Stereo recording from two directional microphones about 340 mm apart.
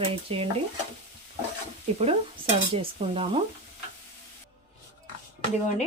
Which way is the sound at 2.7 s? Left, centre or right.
Centre.